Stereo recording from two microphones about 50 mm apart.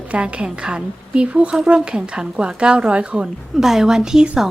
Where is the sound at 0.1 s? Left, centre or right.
Right.